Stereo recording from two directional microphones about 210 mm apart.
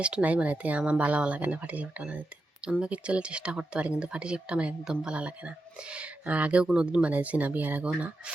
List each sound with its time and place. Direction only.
0.0 s speech: 5° right (ahead or behind)